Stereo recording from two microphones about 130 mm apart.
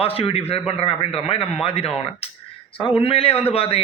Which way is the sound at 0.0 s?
45° left (ahead or behind).